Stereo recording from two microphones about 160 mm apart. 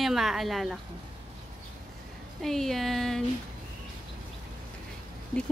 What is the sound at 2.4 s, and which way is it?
Speech, centre (ahead or behind).